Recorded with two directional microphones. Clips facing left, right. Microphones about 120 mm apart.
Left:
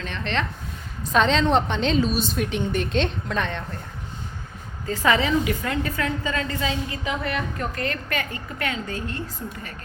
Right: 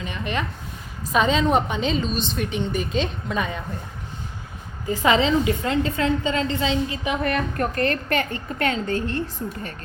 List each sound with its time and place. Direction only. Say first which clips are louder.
0.0 s a sound: even; 10° right (ahead or behind)
1.1 s a woman's voice: even; 5° right (ahead or behind)
4.9 s a woman's voice: right 2 dB; 20° right (ahead or behind)
7.2 s a woman's voice: right 4 dB; 50° right (ahead or behind)